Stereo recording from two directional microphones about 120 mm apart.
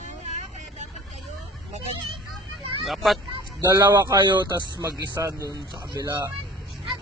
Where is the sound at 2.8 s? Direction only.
Centre (ahead or behind).